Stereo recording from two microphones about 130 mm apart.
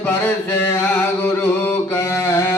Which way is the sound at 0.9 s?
15° left (ahead or behind).